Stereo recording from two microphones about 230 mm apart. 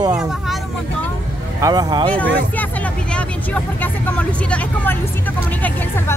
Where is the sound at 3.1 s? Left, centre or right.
Centre.